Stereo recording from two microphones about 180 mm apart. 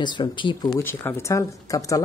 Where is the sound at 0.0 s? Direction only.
25° left (ahead or behind).